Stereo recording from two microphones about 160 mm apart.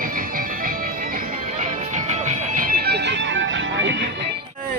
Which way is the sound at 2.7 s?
85° right.